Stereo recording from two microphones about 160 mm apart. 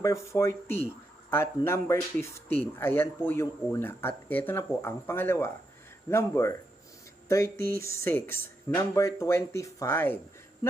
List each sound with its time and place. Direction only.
0.0 s speech: 20° left (ahead or behind)
7.7 s speech: 65° right (ahead or behind)
8.0 s speech: 15° left (ahead or behind)